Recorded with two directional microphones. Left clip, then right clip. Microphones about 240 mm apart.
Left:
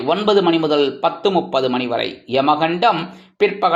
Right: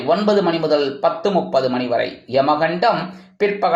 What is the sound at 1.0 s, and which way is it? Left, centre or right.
A man's voice, centre.